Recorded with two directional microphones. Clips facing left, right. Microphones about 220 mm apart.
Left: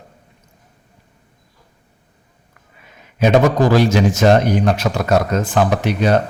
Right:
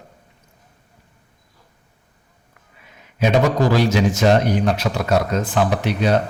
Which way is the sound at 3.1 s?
45° left (ahead or behind).